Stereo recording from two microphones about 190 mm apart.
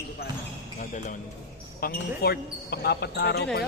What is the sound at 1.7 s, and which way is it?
Speech, 55° left (ahead or behind).